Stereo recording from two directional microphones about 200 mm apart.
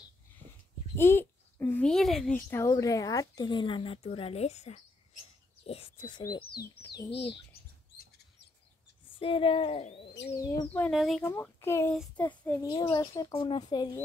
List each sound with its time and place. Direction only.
0.9 s a sound: 10° left (ahead or behind)
2.7 s speech: 15° left (ahead or behind)
9.2 s speech: 25° left (ahead or behind)
10.3 s speech: 15° left (ahead or behind)
10.9 s speech: centre (ahead or behind)
11.2 s speech: 10° left (ahead or behind)
12.6 s speech: 20° left (ahead or behind)